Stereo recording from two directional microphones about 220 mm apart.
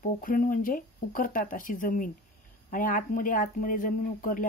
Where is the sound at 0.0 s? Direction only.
40° left (ahead or behind).